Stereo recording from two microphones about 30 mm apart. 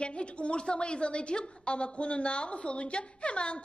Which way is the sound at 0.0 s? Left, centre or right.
Left.